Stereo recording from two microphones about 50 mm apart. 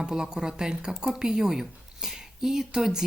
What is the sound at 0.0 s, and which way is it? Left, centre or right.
Speech, centre.